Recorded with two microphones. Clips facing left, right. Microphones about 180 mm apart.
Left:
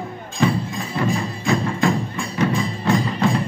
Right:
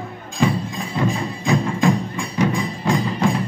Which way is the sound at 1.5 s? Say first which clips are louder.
Right 1 dB; 15° right (ahead or behind).